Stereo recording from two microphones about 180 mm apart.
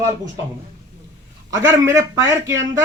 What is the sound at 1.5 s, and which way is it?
A man's voice, 15° right (ahead or behind).